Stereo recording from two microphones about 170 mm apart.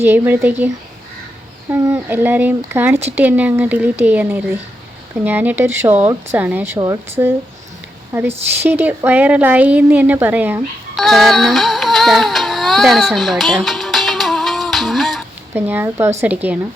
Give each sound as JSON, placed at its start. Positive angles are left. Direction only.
{"t": 0.0, "sound": "a woman's voice", "side_deg": -10}
{"t": 1.7, "sound": "a woman's voice", "side_deg": -15}
{"t": 6.7, "sound": "a woman's voice", "side_deg": -20}
{"t": 11.0, "sound": "music", "side_deg": 0}
{"t": 15.5, "sound": "a woman's voice", "side_deg": -10}